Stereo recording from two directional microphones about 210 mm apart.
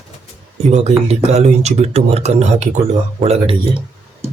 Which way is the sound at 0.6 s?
30° right (ahead or behind).